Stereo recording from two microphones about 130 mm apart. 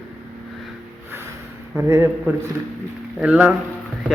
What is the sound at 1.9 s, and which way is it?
A man's voice, 20° right (ahead or behind).